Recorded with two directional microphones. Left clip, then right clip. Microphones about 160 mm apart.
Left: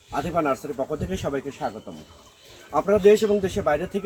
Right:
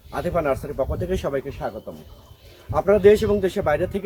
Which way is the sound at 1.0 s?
10° right (ahead or behind).